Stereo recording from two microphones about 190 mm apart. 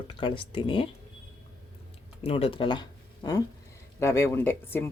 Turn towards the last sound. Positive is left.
turn(degrees=10)  # may be behind; listen again after turning